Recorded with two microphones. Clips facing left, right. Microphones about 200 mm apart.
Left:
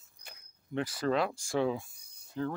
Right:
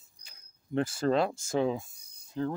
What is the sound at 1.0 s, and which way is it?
Speech, 30° right (ahead or behind).